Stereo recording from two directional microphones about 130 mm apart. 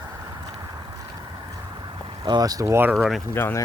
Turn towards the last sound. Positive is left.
turn(degrees=20)  # may be behind; listen again after turning